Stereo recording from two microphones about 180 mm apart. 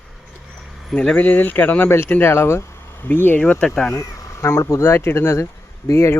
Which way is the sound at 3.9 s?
15° left (ahead or behind).